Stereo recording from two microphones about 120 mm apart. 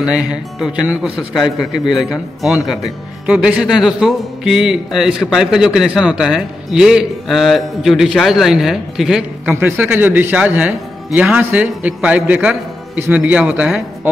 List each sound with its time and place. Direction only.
0.1 s speech: 5° right (ahead or behind)
9.6 s a man's voice: 15° right (ahead or behind)